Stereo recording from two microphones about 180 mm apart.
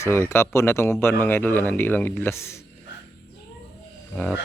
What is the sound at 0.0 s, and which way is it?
Speech, 15° left (ahead or behind).